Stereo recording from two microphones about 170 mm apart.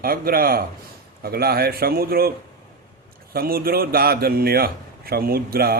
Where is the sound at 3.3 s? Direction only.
60° right (ahead or behind).